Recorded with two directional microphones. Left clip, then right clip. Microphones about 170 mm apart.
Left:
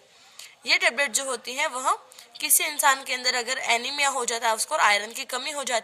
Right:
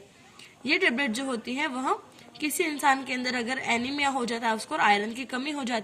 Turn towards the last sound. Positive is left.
turn(degrees=25)  # may be behind; listen again after turning